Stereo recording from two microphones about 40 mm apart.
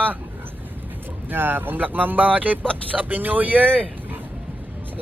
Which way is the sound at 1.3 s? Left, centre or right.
Right.